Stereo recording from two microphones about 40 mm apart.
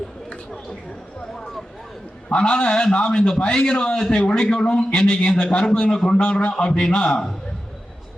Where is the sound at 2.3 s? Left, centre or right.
Left.